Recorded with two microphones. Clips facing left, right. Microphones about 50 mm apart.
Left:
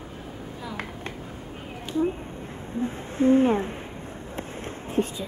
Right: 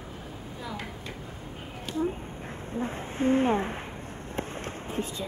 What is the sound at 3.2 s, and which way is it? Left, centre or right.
Speech, right.